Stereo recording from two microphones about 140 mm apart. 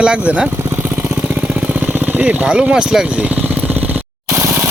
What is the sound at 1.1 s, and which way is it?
Vehicle, 10° right (ahead or behind).